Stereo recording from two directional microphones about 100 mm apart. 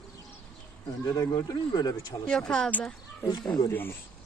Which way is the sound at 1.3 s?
45° left (ahead or behind).